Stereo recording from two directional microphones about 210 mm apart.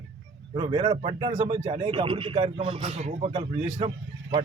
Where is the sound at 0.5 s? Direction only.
20° right (ahead or behind).